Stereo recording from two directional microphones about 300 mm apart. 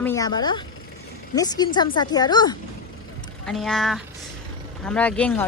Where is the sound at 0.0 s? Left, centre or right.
Centre.